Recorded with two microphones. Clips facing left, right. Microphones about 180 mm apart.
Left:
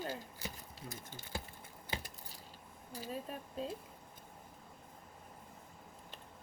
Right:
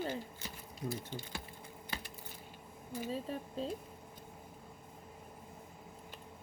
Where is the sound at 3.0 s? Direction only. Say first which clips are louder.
Right 4 dB; 30° right (ahead or behind).